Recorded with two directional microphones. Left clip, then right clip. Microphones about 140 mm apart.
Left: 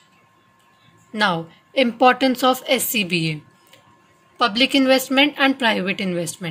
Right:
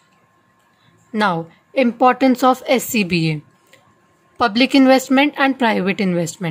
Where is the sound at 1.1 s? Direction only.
30° right (ahead or behind).